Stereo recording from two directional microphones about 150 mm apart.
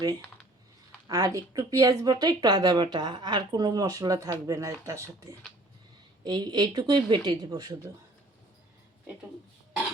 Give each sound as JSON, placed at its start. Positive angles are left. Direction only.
{"t": 1.0, "sound": "speech", "side_deg": -25}